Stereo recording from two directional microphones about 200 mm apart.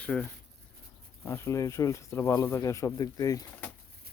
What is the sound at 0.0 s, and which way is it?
Speech, 5° left (ahead or behind).